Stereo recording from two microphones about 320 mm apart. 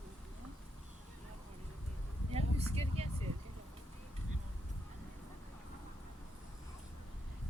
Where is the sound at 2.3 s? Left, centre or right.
Centre.